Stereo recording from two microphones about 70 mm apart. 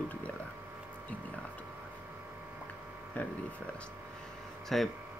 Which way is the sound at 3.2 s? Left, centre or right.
Left.